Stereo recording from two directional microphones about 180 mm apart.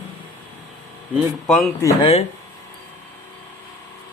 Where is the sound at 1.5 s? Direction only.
5° left (ahead or behind).